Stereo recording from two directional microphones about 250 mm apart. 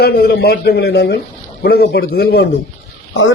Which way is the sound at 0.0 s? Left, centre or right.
Left.